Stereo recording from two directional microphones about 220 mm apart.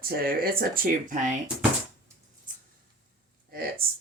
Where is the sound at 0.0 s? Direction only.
45° right (ahead or behind).